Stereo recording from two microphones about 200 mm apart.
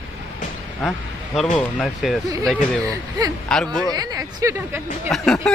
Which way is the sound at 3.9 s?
20° right (ahead or behind).